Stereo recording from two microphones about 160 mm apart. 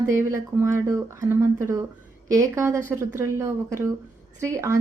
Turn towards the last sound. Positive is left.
turn(degrees=-20)  # may be behind; listen again after turning